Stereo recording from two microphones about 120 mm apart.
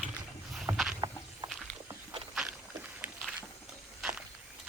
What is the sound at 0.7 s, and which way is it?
Boat, 30° right (ahead or behind).